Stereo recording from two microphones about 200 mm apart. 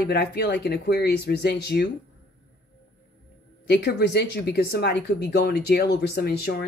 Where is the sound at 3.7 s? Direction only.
55° left (ahead or behind).